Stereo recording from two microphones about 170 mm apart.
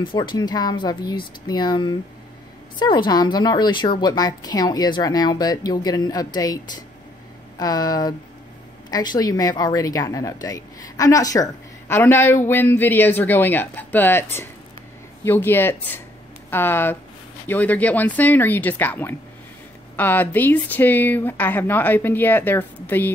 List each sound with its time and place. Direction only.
0.0 s a woman's voice: 25° left (ahead or behind); by 23.1 s 10° left (ahead or behind)